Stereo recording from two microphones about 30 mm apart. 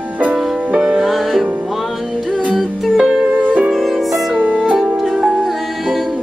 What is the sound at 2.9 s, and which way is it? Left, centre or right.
Music, right.